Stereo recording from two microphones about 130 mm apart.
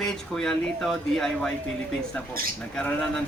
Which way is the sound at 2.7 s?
5° left (ahead or behind).